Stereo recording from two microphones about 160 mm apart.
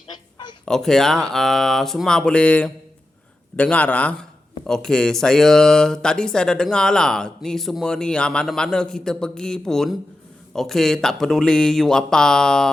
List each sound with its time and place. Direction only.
0.1 s honk: 25° left (ahead or behind)
0.6 s a man's voice: 5° left (ahead or behind)